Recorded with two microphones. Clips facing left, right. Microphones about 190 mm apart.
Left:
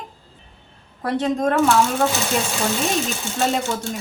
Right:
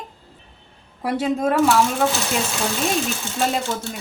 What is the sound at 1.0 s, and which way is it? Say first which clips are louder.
Speech: left 1 dB; 10° right (ahead or behind).